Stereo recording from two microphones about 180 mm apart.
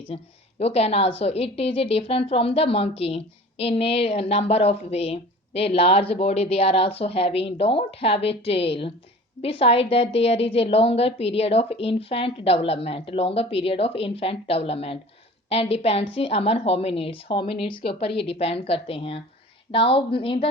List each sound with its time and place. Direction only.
0.1 s a woman's voice: 30° left (ahead or behind)